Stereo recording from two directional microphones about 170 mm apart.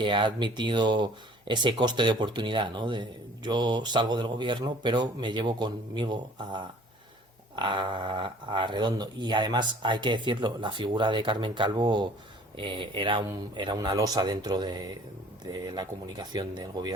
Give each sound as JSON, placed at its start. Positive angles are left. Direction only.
{"t": 0.0, "sound": "speech", "side_deg": -30}